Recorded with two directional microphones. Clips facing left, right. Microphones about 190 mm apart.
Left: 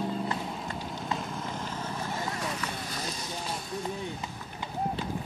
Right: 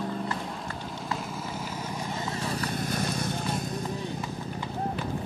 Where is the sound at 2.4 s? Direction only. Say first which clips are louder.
Right 3 dB; 35° right (ahead or behind).